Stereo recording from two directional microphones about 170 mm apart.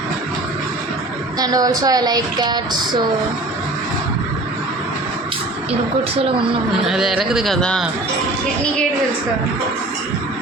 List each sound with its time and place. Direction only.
1.4 s speech: 20° right (ahead or behind)
6.8 s a man's voice: centre (ahead or behind)